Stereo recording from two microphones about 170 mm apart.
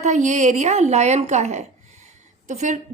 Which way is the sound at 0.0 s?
45° right (ahead or behind).